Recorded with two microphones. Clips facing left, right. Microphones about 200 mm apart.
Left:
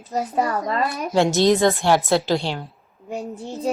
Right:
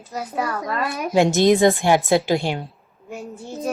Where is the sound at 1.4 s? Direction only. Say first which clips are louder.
Right 2 dB; 20° right (ahead or behind).